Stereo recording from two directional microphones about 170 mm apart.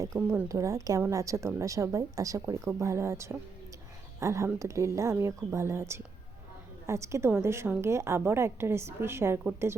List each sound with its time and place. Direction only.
0.2 s a woman's voice: 10° right (ahead or behind)